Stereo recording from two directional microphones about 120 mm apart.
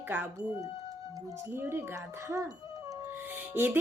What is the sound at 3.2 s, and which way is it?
Music, 15° right (ahead or behind).